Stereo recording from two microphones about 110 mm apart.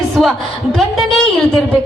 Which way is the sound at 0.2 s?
Centre (ahead or behind).